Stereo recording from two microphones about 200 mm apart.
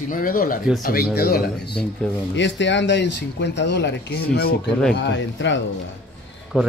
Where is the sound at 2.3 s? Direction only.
65° left (ahead or behind).